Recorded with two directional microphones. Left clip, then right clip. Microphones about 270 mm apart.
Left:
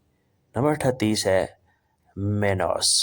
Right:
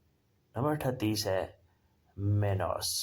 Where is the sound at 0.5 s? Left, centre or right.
Left.